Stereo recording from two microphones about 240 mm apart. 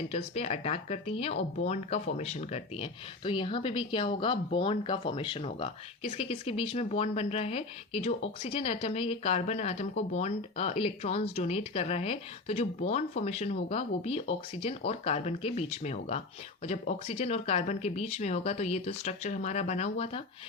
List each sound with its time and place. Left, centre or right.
0.1 s speech: left